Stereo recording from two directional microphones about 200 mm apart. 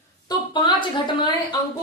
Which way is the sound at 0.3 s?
25° left (ahead or behind).